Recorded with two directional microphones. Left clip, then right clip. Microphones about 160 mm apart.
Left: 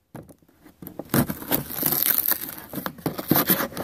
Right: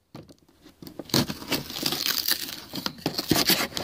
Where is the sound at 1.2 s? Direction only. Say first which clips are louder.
Left 1 dB; centre (ahead or behind).